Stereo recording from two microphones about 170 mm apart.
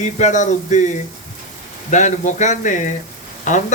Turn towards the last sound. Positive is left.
turn(degrees=45)  # may be behind; listen again after turning